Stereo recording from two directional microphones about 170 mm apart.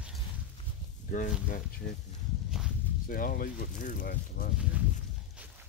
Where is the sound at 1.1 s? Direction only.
50° left (ahead or behind).